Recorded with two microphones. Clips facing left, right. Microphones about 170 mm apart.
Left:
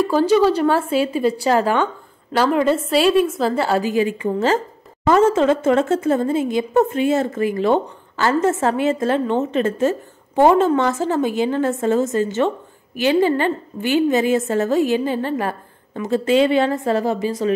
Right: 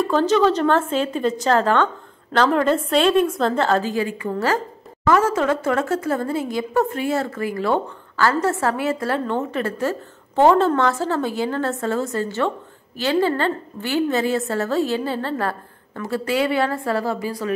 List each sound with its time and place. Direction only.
0.0 s a woman's voice: 10° left (ahead or behind)